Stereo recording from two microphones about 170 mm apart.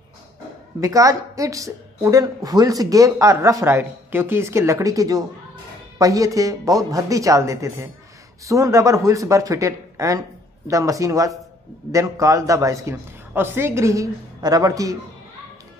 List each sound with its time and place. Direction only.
0.7 s a woman's voice: 20° right (ahead or behind)